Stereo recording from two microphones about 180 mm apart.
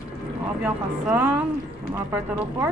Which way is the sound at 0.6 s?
10° right (ahead or behind).